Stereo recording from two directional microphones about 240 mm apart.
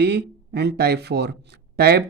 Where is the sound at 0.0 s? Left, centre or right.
Right.